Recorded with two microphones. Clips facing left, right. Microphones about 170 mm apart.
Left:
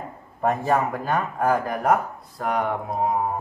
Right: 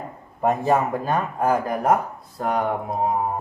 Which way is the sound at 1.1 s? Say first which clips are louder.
Even; centre (ahead or behind).